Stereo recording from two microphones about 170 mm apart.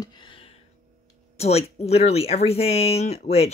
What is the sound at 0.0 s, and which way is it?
Music, 30° left (ahead or behind).